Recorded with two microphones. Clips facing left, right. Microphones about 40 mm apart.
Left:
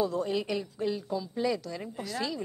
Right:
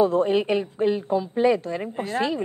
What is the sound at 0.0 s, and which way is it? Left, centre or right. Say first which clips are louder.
A woman's voice: right 10 dB; right.